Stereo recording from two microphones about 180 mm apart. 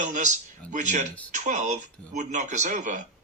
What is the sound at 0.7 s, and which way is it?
A man's voice, 40° right (ahead or behind).